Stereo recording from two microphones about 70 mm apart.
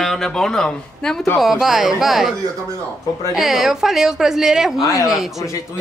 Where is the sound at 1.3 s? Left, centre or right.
Centre.